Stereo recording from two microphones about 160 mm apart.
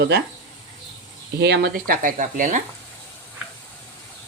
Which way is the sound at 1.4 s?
90° right.